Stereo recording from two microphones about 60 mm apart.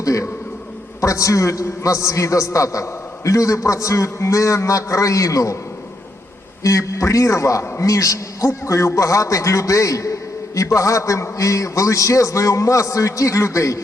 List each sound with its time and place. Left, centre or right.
0.0 s a man's voice: left
6.6 s a man's voice: left